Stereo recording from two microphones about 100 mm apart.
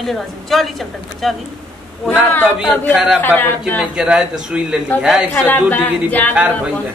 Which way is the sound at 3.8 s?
5° right (ahead or behind).